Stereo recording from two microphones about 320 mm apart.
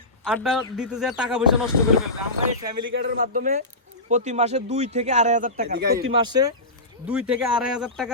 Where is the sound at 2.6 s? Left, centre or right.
Centre.